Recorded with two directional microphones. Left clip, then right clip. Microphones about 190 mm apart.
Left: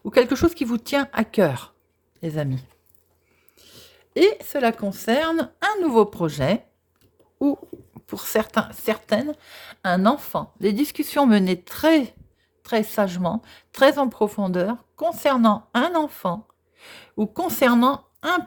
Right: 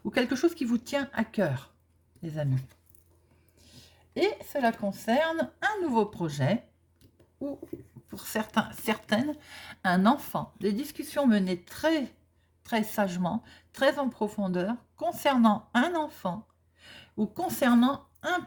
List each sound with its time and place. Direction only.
0.0 s speech: 35° left (ahead or behind)
3.6 s speech: 50° left (ahead or behind)
8.0 s speech: 45° left (ahead or behind); by 10.4 s 25° left (ahead or behind)
10.6 s speech: 45° left (ahead or behind)